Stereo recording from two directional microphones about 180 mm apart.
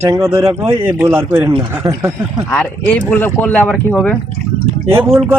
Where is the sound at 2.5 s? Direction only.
5° left (ahead or behind).